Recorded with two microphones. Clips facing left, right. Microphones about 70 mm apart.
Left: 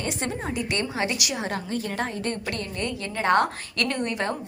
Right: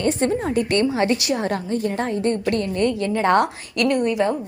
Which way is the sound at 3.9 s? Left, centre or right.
Centre.